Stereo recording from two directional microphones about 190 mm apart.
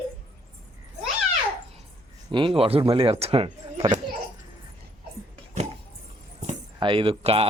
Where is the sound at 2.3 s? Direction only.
25° right (ahead or behind).